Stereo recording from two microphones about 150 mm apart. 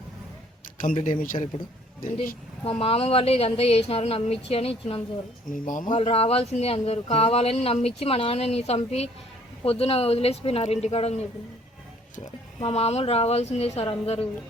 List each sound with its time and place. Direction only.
1.2 s speech: 65° left (ahead or behind)
2.6 s speech: 40° left (ahead or behind)
5.5 s speech: 60° left (ahead or behind)
5.9 s speech: 40° left (ahead or behind)
12.6 s speech: 45° left (ahead or behind)